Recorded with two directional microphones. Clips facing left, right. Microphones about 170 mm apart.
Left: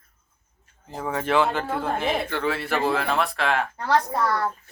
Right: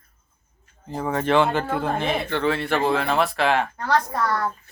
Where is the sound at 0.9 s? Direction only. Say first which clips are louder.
Right 3 dB; 5° left (ahead or behind).